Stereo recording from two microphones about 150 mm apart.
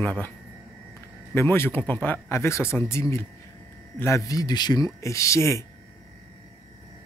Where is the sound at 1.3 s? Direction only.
15° left (ahead or behind).